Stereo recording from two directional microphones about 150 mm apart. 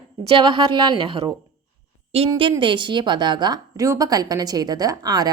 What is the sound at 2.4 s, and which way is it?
Speech, 35° right (ahead or behind).